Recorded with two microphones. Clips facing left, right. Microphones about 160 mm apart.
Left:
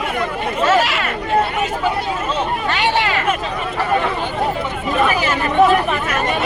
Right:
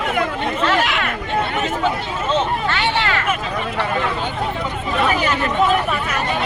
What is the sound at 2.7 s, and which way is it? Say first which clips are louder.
Hubbub: left 2 dB; 15° left (ahead or behind).